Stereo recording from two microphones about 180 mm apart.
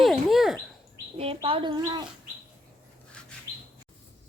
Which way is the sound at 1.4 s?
30° right (ahead or behind).